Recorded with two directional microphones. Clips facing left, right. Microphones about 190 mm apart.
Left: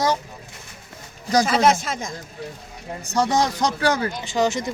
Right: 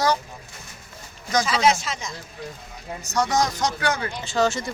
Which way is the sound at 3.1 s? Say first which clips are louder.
Left 2 dB; 30° left (ahead or behind).